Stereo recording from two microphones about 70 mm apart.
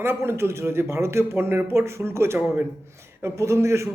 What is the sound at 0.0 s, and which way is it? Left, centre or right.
A man's voice, right.